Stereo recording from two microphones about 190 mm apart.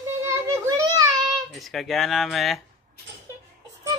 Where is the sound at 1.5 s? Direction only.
Centre (ahead or behind).